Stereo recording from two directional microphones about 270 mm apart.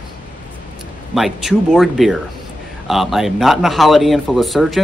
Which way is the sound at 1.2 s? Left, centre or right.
Centre.